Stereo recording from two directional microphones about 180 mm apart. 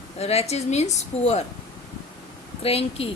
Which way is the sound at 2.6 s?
35° left (ahead or behind).